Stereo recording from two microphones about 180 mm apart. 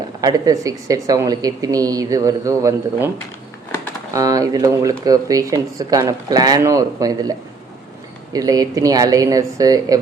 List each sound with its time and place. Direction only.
0.2 s speech: 20° right (ahead or behind)
4.1 s speech: 20° right (ahead or behind)